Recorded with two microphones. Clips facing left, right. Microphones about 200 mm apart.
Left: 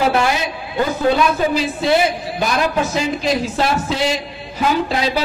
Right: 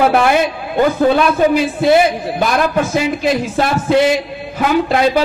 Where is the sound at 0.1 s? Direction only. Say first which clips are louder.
Right 5 dB; 55° right (ahead or behind).